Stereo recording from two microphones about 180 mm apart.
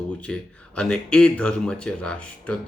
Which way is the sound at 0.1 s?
5° left (ahead or behind).